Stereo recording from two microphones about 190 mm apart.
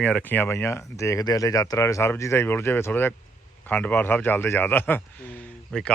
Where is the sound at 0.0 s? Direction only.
10° left (ahead or behind).